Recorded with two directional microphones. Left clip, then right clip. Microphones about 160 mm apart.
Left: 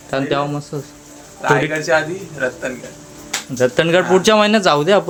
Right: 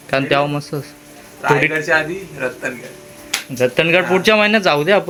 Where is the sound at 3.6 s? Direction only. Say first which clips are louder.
Even; 10° left (ahead or behind).